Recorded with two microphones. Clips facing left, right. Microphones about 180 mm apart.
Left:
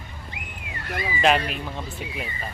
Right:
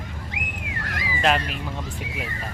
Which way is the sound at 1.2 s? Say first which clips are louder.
Left 1 dB; centre (ahead or behind).